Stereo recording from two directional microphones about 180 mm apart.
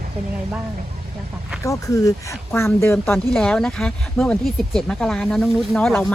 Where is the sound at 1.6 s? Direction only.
15° left (ahead or behind).